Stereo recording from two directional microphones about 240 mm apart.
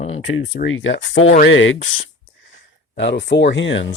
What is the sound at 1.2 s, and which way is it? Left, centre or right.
Speech, left.